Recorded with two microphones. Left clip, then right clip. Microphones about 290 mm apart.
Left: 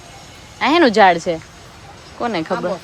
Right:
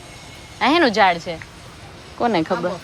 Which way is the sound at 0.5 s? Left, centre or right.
Centre.